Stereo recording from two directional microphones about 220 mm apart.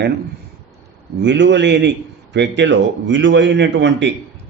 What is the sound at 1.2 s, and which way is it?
Mantra, 55° right (ahead or behind).